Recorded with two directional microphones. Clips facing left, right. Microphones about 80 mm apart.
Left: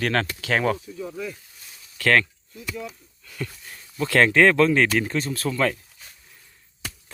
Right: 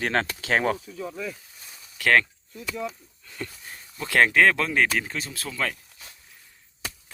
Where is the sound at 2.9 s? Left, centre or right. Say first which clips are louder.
Even; right.